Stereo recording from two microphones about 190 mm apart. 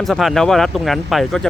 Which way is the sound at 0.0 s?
Centre (ahead or behind).